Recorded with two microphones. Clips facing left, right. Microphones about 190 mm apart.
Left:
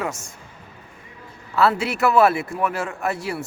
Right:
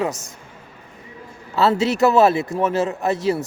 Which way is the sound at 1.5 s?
25° right (ahead or behind).